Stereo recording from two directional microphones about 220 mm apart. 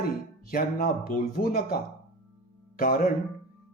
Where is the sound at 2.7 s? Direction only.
40° left (ahead or behind).